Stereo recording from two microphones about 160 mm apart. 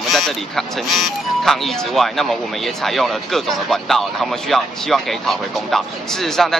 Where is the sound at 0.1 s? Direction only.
Centre (ahead or behind).